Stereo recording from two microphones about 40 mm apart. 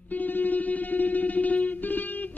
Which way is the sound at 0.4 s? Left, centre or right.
Left.